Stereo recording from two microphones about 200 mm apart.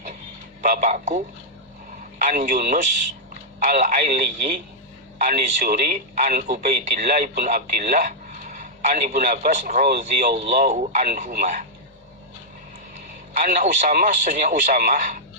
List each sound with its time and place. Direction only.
0.6 s speech: 40° right (ahead or behind)
2.2 s speech: 40° right (ahead or behind)
13.4 s speech: 40° right (ahead or behind)